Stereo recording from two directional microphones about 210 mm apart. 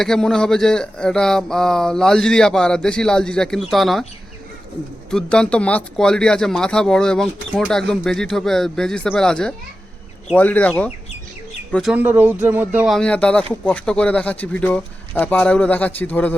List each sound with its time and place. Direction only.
0.0 s speech: 5° left (ahead or behind)
5.1 s speech: 5° left (ahead or behind)